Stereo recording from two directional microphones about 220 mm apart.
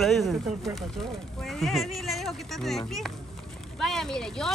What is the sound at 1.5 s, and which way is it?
Speech, centre (ahead or behind).